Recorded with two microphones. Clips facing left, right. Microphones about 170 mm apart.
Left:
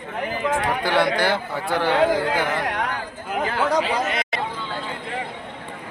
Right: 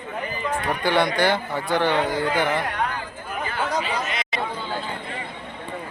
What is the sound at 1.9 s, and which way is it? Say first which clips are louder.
Speech: left 4 dB; 90° left.